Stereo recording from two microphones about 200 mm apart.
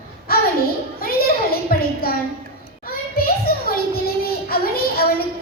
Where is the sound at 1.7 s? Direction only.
45° left (ahead or behind).